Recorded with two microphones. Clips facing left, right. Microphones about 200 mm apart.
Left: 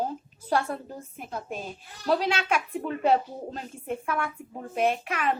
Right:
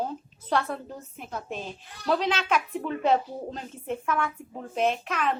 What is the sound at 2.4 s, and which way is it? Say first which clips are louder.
Speech: right 1 dB; 50° left (ahead or behind).